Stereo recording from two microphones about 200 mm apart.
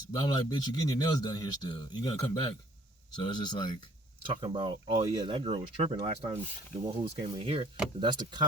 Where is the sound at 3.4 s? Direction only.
20° left (ahead or behind).